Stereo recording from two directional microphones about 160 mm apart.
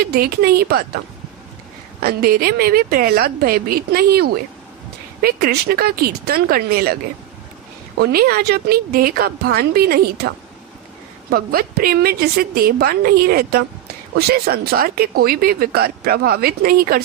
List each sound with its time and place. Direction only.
0.0 s speech: 75° right (ahead or behind)
2.0 s speech: 70° right (ahead or behind)
8.0 s speech: 75° right (ahead or behind)
11.2 s speech: 70° right (ahead or behind)